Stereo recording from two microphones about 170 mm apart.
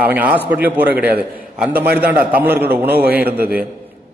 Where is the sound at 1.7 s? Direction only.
70° right (ahead or behind).